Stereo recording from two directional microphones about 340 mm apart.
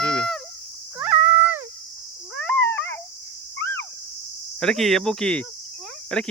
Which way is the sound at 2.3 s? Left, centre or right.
Centre.